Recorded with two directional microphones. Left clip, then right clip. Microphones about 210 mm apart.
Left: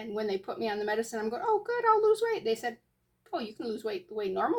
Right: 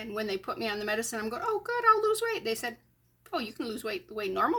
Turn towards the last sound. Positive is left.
turn(degrees=-25)  # may be behind; listen again after turning